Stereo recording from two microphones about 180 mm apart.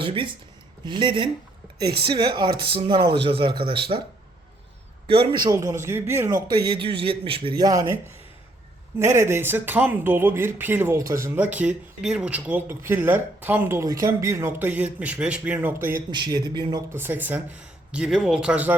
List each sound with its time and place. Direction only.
0.0 s a man's voice: 30° right (ahead or behind)
5.0 s a man's voice: 30° right (ahead or behind); by 16.0 s 10° right (ahead or behind)
16.1 s speech: 25° right (ahead or behind); by 18.8 s 10° right (ahead or behind)